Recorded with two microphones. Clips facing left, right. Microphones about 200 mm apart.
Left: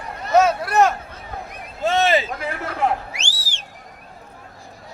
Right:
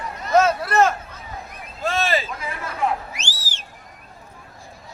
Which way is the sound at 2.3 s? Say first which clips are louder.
Left 4 dB; 65° left (ahead or behind).